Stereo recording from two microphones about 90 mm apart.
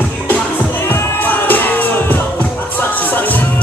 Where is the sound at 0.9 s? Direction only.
20° left (ahead or behind).